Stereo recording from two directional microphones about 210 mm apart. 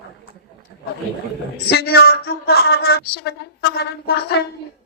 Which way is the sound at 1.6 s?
50° left (ahead or behind).